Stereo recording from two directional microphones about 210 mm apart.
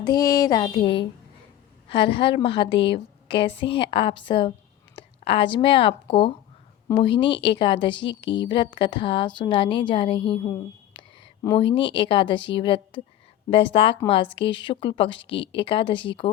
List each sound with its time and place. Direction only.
0.0 s a woman's voice: 20° left (ahead or behind)
2.1 s a woman's voice: 25° left (ahead or behind)